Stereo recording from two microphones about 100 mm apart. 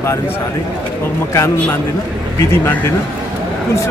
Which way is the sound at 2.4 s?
25° left (ahead or behind).